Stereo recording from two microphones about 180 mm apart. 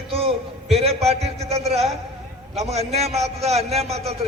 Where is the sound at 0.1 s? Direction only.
35° right (ahead or behind).